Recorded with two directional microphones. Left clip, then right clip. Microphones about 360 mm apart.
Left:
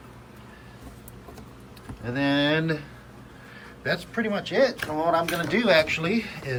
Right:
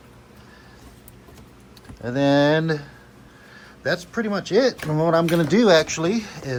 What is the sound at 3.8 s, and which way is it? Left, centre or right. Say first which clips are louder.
Speech: right 4 dB; centre.